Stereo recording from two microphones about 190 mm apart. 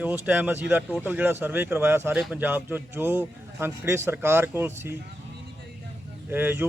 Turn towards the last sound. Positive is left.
turn(degrees=-10)  # may be behind; listen again after turning